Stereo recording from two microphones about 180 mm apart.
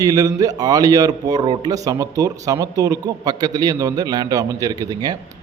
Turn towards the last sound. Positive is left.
turn(degrees=-20)  # may be behind; listen again after turning